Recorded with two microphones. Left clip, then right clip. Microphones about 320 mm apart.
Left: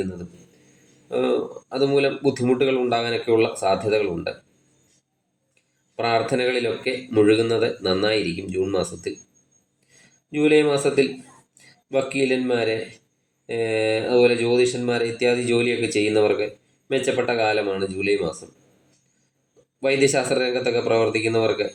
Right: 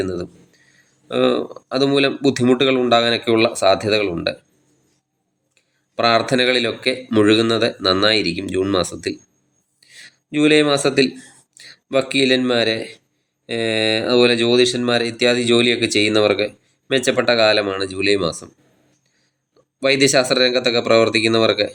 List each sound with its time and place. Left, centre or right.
1.0 s speech: right
6.0 s speech: right
10.3 s speech: right
19.8 s speech: right